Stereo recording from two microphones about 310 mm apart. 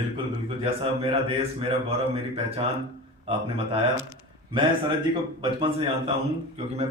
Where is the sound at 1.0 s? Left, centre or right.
Centre.